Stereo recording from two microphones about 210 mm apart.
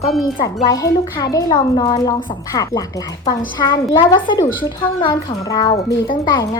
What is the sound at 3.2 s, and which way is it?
A child's voice, 20° left (ahead or behind).